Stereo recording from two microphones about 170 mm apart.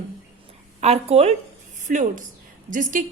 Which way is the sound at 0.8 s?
40° right (ahead or behind).